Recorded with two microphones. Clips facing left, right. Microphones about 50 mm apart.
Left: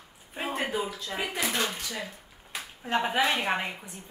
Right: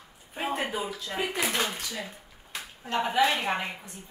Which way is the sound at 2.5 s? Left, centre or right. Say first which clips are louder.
Left 1 dB; centre.